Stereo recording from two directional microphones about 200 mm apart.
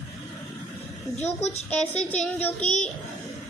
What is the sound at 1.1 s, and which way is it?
Speech, 30° left (ahead or behind).